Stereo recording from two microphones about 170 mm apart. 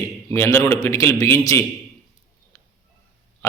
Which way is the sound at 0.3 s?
15° left (ahead or behind).